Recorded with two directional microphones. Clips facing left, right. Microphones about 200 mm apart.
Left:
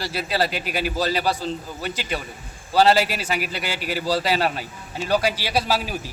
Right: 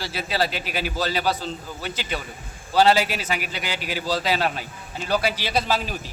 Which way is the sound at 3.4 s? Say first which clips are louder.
Left 2 dB; 40° left (ahead or behind).